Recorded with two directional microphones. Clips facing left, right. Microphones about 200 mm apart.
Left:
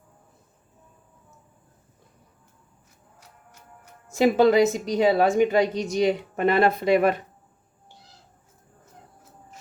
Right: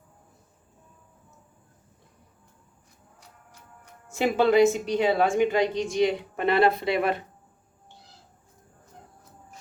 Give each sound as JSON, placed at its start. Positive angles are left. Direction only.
{"t": 4.2, "sound": "a woman's voice", "side_deg": 40}